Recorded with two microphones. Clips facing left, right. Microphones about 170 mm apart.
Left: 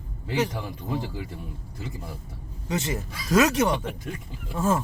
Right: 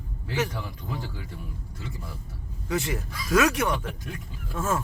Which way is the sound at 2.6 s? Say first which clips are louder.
Even; 20° left (ahead or behind).